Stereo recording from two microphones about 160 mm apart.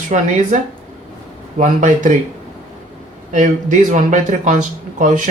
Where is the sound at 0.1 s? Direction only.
45° right (ahead or behind).